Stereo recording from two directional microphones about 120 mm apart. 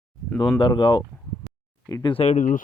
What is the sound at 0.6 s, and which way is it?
Speech, 35° left (ahead or behind).